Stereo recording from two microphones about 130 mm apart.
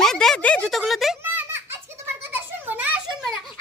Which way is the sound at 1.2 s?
15° right (ahead or behind).